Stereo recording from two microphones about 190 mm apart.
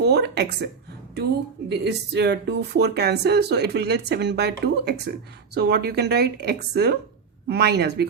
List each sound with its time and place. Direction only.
0.0 s speech: 60° right (ahead or behind)
1.7 s speech: 60° right (ahead or behind)